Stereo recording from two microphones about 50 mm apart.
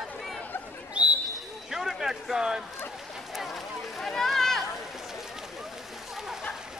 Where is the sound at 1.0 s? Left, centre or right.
Right.